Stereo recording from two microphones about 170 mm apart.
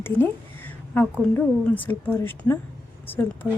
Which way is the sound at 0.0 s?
10° left (ahead or behind).